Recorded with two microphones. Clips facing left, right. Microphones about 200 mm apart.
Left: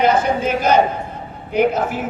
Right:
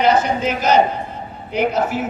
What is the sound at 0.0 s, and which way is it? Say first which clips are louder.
A woman's voice: even; 50° left (ahead or behind).